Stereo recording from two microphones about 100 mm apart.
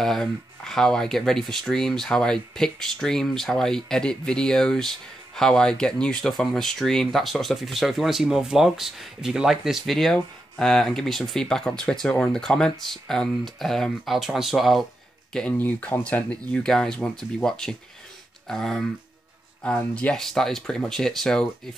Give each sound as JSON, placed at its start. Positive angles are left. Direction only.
{"t": 0.0, "sound": "speech", "side_deg": 5}
{"t": 15.5, "sound": "speech", "side_deg": 20}
{"t": 19.6, "sound": "speech", "side_deg": 15}
{"t": 20.1, "sound": "speech", "side_deg": 5}